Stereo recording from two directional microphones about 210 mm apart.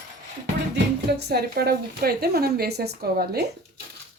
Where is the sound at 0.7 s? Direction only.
50° right (ahead or behind).